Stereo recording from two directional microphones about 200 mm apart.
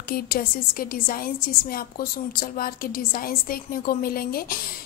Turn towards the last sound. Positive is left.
turn(degrees=45)  # may be behind; listen again after turning